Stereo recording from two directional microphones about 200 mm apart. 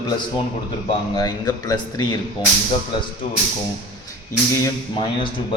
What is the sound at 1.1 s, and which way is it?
Speech, 20° left (ahead or behind).